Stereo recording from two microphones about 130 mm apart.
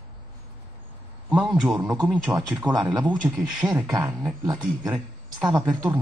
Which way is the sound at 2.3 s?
15° right (ahead or behind).